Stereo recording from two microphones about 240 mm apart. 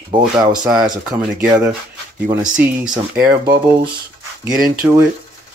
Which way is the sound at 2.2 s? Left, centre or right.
Centre.